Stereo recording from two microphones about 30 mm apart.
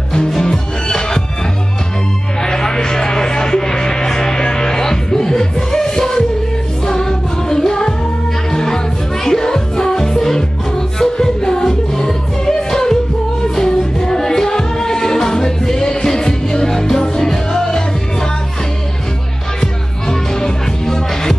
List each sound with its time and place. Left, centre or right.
0.4 s music: left
2.4 s music: left
19.6 s music: centre